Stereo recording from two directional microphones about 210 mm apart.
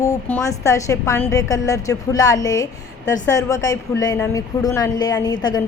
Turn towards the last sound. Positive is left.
turn(degrees=20)  # may be behind; listen again after turning